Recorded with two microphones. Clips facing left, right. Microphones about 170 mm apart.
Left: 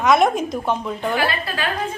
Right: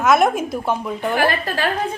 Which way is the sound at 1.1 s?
45° right (ahead or behind).